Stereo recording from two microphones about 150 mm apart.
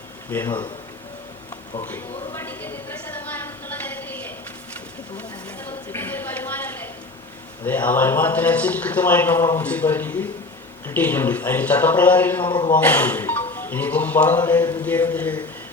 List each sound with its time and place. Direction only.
0.3 s a man's voice: 15° left (ahead or behind)
1.9 s a sound: 15° left (ahead or behind)
5.5 s a sound: 15° left (ahead or behind)
7.6 s a man's voice: 10° left (ahead or behind)
12.5 s a man's voice: 30° left (ahead or behind)
12.8 s a man's voice: 10° left (ahead or behind)